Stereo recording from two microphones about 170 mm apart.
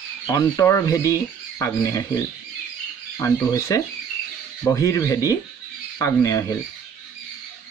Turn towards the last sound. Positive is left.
turn(degrees=15)  # may be behind; listen again after turning